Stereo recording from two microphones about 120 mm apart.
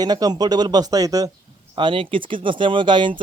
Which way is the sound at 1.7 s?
45° right (ahead or behind).